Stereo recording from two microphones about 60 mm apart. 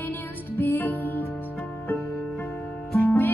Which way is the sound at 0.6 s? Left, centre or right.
Left.